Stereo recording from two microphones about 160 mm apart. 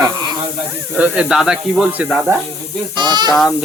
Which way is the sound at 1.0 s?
5° right (ahead or behind).